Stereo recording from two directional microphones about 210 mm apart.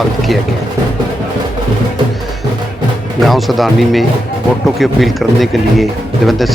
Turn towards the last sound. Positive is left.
turn(degrees=0)  # may be behind; listen again after turning